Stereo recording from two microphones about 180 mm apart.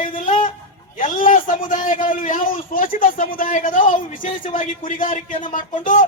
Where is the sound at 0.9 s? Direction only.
45° left (ahead or behind).